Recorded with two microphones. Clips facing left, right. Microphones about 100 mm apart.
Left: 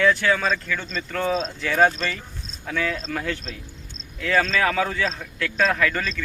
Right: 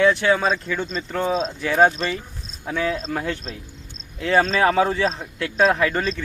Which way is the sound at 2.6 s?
20° right (ahead or behind).